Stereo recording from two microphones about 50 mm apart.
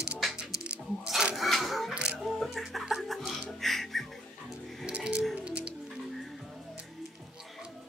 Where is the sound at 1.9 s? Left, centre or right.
Right.